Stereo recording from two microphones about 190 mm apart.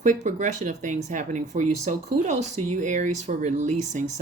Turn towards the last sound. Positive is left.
turn(degrees=-40)  # may be behind; listen again after turning